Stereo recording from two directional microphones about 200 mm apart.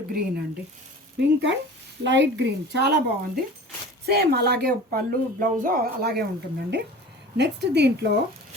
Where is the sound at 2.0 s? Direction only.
60° right (ahead or behind).